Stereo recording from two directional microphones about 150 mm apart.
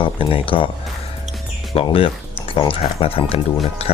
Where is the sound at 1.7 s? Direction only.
40° left (ahead or behind).